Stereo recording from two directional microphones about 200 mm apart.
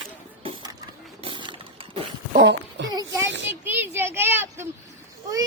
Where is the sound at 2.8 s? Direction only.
65° right (ahead or behind).